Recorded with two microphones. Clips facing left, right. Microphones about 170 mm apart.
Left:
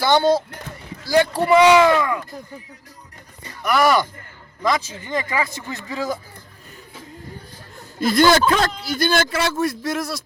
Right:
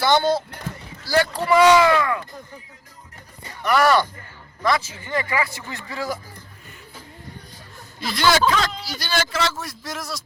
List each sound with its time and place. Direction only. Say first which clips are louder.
0.1 s speech: left 5 dB; 20° left (ahead or behind)
3.6 s speech: even; 10° left (ahead or behind)
7.9 s a man's voice: left 5 dB; 50° left (ahead or behind)